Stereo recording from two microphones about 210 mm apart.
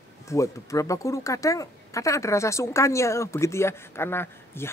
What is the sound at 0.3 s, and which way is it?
Speech, 15° left (ahead or behind).